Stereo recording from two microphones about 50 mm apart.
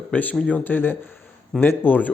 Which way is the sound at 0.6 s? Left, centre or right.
Left.